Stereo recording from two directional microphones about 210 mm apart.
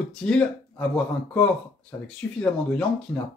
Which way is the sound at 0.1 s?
5° left (ahead or behind).